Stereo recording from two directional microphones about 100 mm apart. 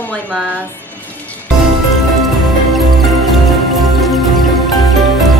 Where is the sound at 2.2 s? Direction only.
Centre (ahead or behind).